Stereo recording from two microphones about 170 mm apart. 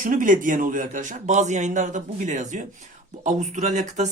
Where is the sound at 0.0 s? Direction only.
50° right (ahead or behind).